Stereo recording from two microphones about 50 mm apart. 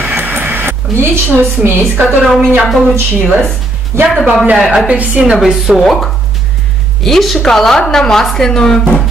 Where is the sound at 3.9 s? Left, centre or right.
Right.